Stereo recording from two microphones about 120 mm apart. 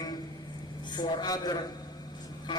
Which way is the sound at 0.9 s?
40° left (ahead or behind).